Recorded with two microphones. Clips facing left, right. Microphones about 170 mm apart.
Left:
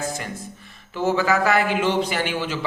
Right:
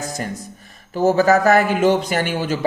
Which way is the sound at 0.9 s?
40° right (ahead or behind).